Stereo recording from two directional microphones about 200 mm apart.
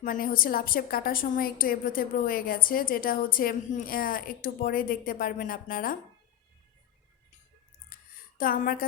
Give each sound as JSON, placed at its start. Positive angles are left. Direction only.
{"t": 0.0, "sound": "a woman's voice", "side_deg": 45}
{"t": 7.9, "sound": "a sound", "side_deg": 45}
{"t": 8.4, "sound": "a woman's voice", "side_deg": 45}